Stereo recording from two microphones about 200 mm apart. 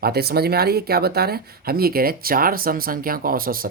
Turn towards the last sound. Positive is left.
turn(degrees=-45)  # may be behind; listen again after turning